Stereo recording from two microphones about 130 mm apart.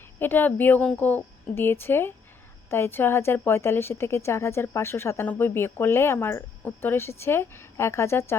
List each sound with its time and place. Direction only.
0.2 s a woman's voice: 15° left (ahead or behind)